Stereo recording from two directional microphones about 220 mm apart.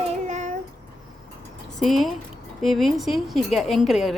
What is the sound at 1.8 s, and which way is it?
A woman's voice, centre (ahead or behind).